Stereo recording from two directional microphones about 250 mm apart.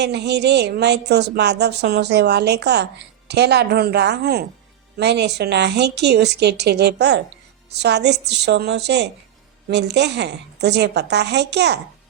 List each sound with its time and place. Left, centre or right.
0.0 s a woman's voice: right